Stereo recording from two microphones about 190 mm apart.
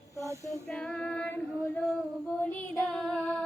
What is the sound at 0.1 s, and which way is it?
Female singing, 15° left (ahead or behind).